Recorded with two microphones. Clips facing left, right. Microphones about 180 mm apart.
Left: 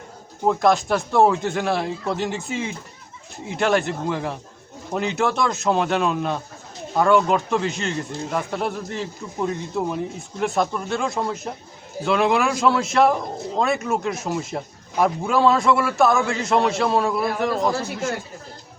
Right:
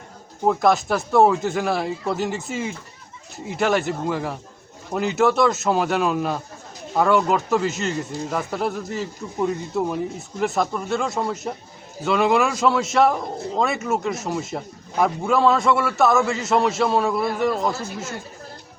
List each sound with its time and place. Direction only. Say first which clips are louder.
0.4 s a man's voice: even; centre (ahead or behind)